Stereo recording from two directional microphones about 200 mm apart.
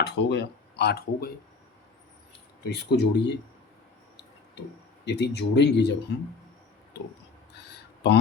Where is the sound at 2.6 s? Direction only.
55° left (ahead or behind).